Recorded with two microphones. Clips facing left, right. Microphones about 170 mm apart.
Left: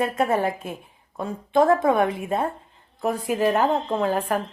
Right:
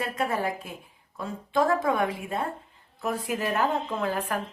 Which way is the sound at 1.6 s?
55° left (ahead or behind).